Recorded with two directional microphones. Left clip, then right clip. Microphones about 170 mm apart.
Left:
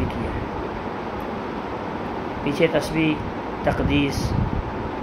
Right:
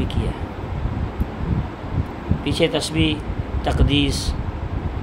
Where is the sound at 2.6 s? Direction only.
55° right (ahead or behind).